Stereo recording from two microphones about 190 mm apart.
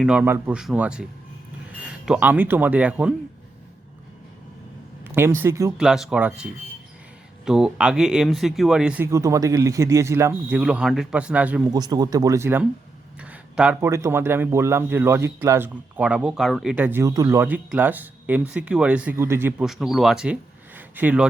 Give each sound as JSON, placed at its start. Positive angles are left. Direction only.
{"t": 0.0, "sound": "speech", "side_deg": -5}
{"t": 5.0, "sound": "speech", "side_deg": -10}
{"t": 5.7, "sound": "speech", "side_deg": -5}
{"t": 11.7, "sound": "speech", "side_deg": -20}